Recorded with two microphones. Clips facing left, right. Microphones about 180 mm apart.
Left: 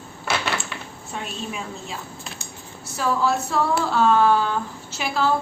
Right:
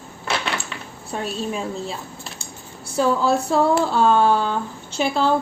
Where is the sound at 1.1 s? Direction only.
35° right (ahead or behind).